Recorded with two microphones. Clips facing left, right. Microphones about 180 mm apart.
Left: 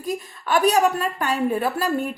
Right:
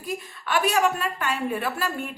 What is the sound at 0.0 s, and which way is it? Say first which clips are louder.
Speech: left 4 dB; 40° left (ahead or behind).